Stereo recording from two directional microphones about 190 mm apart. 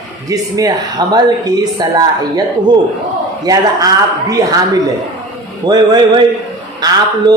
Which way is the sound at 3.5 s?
20° right (ahead or behind).